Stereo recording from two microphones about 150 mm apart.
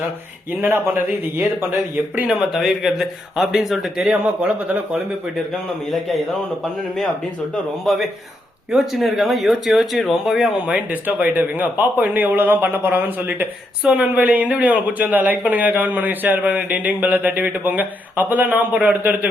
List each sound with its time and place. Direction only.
2.3 s speech: centre (ahead or behind)
7.5 s speech: centre (ahead or behind)